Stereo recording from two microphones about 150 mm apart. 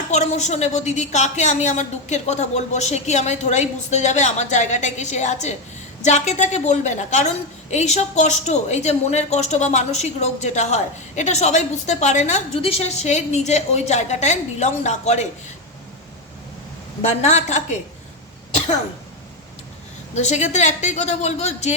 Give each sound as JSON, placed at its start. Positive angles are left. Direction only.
{"t": 0.1, "sound": "a woman's voice", "side_deg": 50}
{"t": 17.0, "sound": "a woman's voice", "side_deg": 50}
{"t": 20.1, "sound": "a woman's voice", "side_deg": 50}